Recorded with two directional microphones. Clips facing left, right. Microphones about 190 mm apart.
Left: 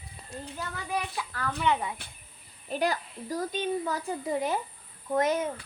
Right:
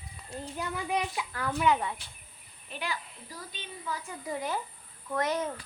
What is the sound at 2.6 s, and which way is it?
A child's voice, 40° left (ahead or behind).